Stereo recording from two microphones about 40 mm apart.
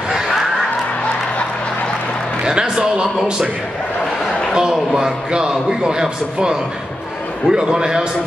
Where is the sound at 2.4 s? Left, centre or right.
Right.